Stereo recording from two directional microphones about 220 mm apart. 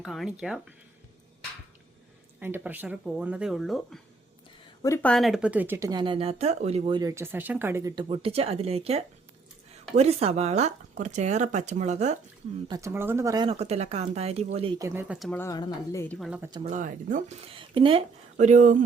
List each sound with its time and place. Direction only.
0.0 s speech: centre (ahead or behind)
2.4 s speech: 10° right (ahead or behind)
4.8 s speech: 15° left (ahead or behind)
5.1 s speech: centre (ahead or behind)
8.0 s speech: 25° right (ahead or behind)
12.6 s speech: 15° right (ahead or behind)
15.3 s speech: 10° left (ahead or behind)
16.4 s speech: 20° right (ahead or behind)
16.6 s speech: 35° right (ahead or behind)